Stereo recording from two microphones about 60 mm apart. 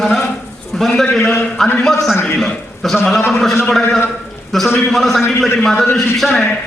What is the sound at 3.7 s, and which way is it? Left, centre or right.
A man's voice, centre.